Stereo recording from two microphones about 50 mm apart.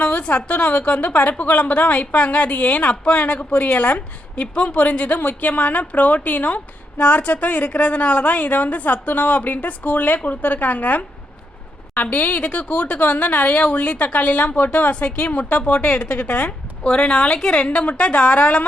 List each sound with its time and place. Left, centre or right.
0.0 s a woman's voice: left
5.2 s a woman's voice: left
12.1 s a woman's voice: left
16.9 s a woman's voice: centre
17.7 s a woman's voice: left